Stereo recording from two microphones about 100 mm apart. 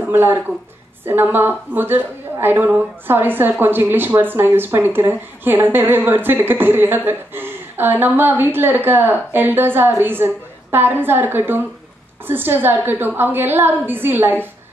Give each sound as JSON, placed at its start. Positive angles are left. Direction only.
{"t": 0.1, "sound": "a woman's voice", "side_deg": -20}